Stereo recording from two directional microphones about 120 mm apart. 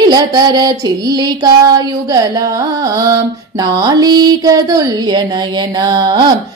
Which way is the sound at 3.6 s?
35° right (ahead or behind).